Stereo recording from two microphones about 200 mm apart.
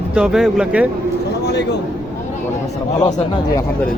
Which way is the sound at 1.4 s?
55° left (ahead or behind).